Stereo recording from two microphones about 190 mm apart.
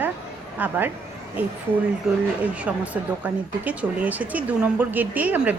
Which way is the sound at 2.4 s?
5° right (ahead or behind).